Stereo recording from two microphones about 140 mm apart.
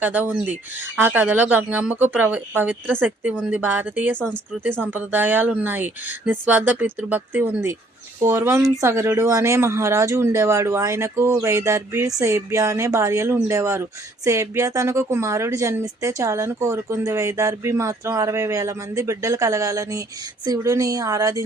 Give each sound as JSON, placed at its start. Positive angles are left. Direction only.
{"t": 0.0, "sound": "a woman's voice", "side_deg": -10}